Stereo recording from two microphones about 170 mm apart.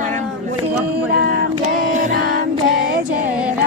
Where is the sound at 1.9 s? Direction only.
50° right (ahead or behind).